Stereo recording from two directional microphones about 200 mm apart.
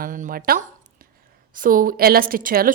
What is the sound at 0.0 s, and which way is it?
A woman's voice, 45° right (ahead or behind).